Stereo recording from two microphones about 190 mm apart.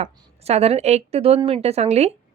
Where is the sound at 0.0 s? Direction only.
35° right (ahead or behind).